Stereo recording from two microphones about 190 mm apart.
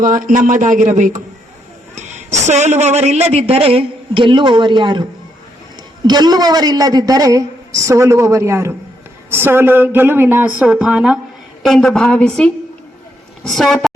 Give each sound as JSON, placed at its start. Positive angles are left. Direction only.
{"t": 0.0, "sound": "speech", "side_deg": -45}
{"t": 2.5, "sound": "speech", "side_deg": -35}
{"t": 6.1, "sound": "a woman's voice", "side_deg": -20}